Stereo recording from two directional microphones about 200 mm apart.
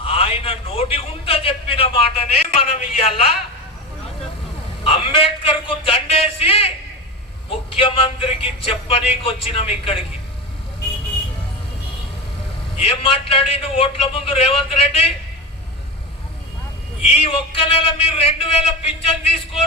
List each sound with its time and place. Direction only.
0.0 s a sound: 30° left (ahead or behind)
2.6 s speech: 30° left (ahead or behind)
4.8 s a man's voice: 25° left (ahead or behind)
12.7 s speech: 30° left (ahead or behind)
17.1 s speech: 30° left (ahead or behind)